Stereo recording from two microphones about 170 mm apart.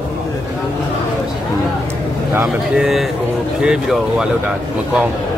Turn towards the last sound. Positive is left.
turn(degrees=-5)  # may be behind; listen again after turning